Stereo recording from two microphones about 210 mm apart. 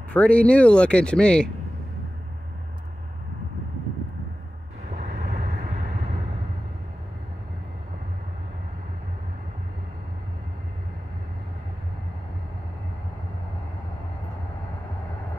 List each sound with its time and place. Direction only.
0.1 s speech: 5° left (ahead or behind)
4.9 s vehicle: 30° right (ahead or behind)